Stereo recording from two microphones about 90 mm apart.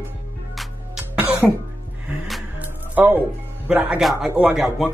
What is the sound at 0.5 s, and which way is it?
Music, 5° right (ahead or behind).